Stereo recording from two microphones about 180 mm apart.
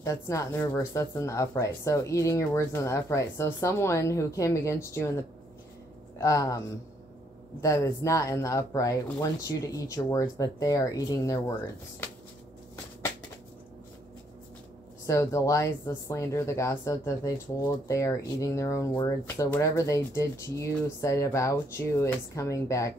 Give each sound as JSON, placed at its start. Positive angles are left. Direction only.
{"t": 0.0, "sound": "speech", "side_deg": 15}
{"t": 6.1, "sound": "speech", "side_deg": 20}
{"t": 7.6, "sound": "speech", "side_deg": 15}
{"t": 15.0, "sound": "speech", "side_deg": 15}